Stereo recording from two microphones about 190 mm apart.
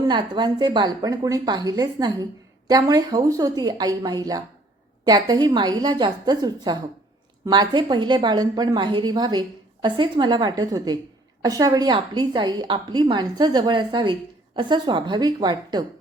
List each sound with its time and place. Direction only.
0.1 s a woman's voice: 25° right (ahead or behind)